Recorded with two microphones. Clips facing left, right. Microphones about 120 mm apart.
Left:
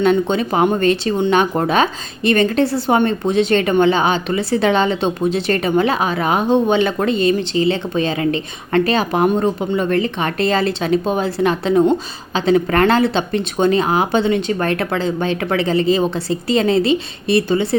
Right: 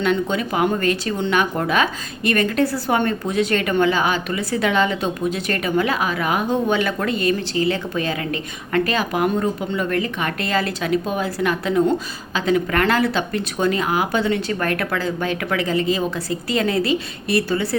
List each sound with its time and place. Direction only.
0.0 s a woman's voice: 25° left (ahead or behind)